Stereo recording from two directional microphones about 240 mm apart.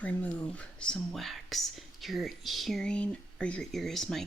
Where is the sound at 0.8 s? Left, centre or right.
Centre.